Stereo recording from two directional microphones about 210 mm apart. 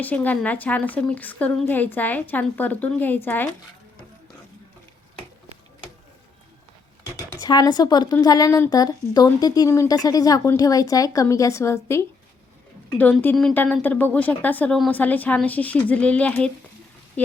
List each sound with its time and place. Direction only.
0.0 s a woman's voice: 10° left (ahead or behind)
7.4 s a woman's voice: 20° left (ahead or behind)